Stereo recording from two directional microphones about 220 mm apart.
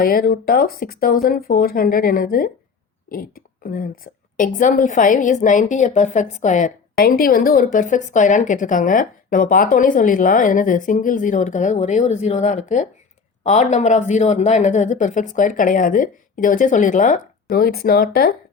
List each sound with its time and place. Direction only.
0.0 s a woman's voice: 40° left (ahead or behind)